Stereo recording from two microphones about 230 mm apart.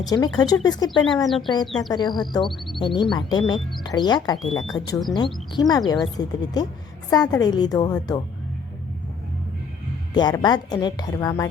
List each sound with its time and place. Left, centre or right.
0.0 s a woman's voice: centre
1.6 s speech: centre
1.9 s speech: centre
4.6 s speech: centre
5.1 s a woman's voice: centre
10.2 s a woman's voice: centre